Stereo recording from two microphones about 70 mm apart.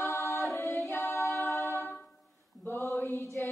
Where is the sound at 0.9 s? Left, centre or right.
Left.